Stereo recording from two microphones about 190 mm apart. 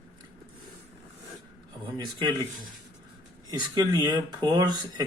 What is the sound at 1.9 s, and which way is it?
Speech, 25° right (ahead or behind).